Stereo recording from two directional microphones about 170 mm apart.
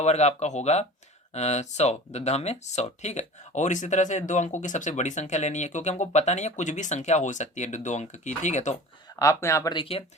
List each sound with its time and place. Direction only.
0.0 s speech: 40° left (ahead or behind)
9.1 s speech: 15° left (ahead or behind)